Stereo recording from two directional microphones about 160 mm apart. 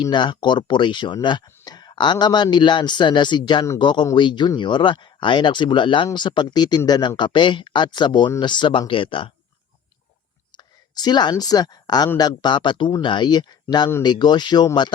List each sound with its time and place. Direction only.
0.0 s speech: 30° left (ahead or behind)
10.6 s speech: 25° left (ahead or behind)